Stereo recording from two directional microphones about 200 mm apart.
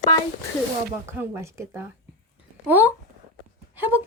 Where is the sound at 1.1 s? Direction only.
15° right (ahead or behind).